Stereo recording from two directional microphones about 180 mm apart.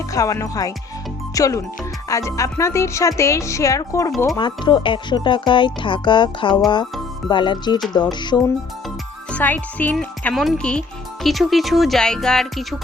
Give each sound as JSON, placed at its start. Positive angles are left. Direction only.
{"t": 0.1, "sound": "speech", "side_deg": 20}
{"t": 9.3, "sound": "speech", "side_deg": 10}